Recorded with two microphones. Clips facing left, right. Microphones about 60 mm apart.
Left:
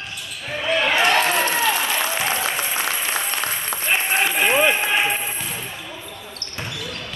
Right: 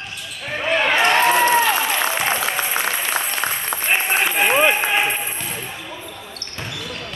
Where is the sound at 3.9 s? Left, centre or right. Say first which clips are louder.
Right 1 dB; right.